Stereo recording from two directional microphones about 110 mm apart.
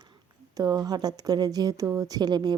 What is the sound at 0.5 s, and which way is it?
Speech, 35° right (ahead or behind).